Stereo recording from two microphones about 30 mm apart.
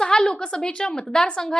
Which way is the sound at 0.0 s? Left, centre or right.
Left.